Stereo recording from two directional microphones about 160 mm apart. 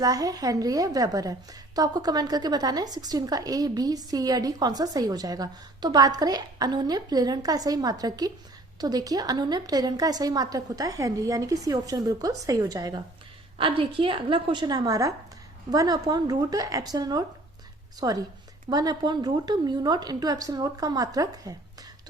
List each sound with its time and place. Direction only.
0.0 s a woman's voice: 20° right (ahead or behind)